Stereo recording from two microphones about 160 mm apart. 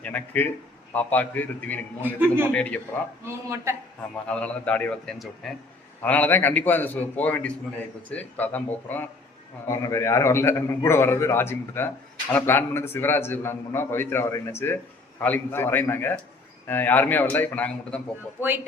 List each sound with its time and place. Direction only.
0.0 s a man's voice: 10° left (ahead or behind)
2.1 s speech: 15° right (ahead or behind)
2.5 s a man's voice: 10° left (ahead or behind)
3.2 s speech: 15° right (ahead or behind)
4.3 s a man's voice: 5° left (ahead or behind)